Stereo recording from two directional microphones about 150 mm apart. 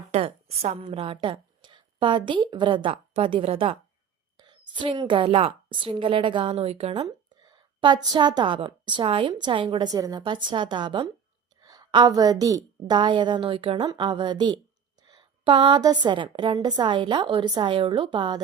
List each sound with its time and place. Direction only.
0.1 s a woman's voice: 40° right (ahead or behind)
7.4 s a woman's voice: 30° right (ahead or behind)
15.1 s a sound: 35° right (ahead or behind)
15.8 s a woman's voice: 30° right (ahead or behind)